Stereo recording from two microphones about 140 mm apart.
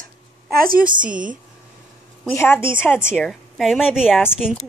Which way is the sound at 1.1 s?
70° right (ahead or behind).